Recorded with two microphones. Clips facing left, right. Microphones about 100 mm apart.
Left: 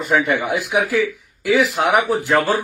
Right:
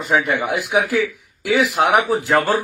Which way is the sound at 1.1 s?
65° right (ahead or behind).